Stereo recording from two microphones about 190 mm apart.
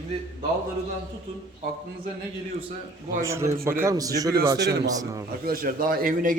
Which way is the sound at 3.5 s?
50° right (ahead or behind).